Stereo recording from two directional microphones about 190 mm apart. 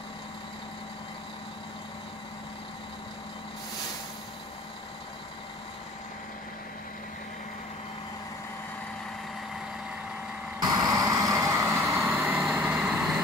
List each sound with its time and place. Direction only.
10.8 s vehicle: 20° right (ahead or behind)
12.0 s vehicle: centre (ahead or behind)